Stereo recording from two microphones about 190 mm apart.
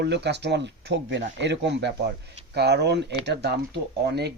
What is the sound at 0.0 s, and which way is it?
Speech, 65° right (ahead or behind).